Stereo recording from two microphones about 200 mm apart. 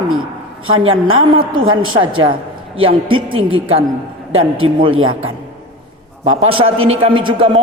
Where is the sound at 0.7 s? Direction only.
25° right (ahead or behind).